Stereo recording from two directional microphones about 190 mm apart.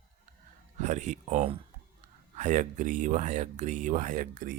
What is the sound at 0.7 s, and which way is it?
Speech, 40° right (ahead or behind).